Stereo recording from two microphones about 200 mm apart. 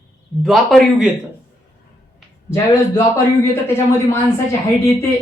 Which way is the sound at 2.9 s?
15° left (ahead or behind).